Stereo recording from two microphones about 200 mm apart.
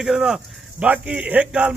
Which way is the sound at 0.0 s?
5° right (ahead or behind).